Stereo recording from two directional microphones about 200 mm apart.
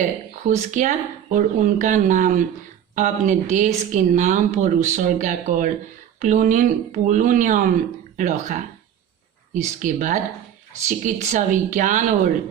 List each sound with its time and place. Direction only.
0.4 s speech: 40° right (ahead or behind)
9.8 s speech: 40° right (ahead or behind)